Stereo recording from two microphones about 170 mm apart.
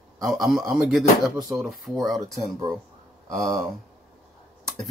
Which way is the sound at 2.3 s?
40° right (ahead or behind).